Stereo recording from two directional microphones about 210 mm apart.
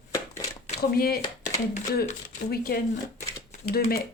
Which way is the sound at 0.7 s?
45° left (ahead or behind).